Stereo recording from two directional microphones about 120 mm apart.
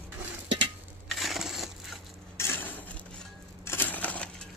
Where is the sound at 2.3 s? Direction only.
20° left (ahead or behind).